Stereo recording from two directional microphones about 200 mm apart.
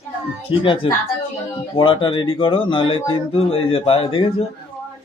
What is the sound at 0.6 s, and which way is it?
Speech, 25° left (ahead or behind).